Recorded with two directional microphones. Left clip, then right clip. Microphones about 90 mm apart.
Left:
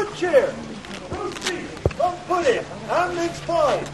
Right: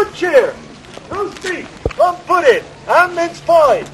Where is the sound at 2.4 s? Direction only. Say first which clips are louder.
Right 8 dB; 35° right (ahead or behind).